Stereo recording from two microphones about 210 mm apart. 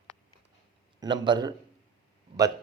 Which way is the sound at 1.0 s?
20° right (ahead or behind).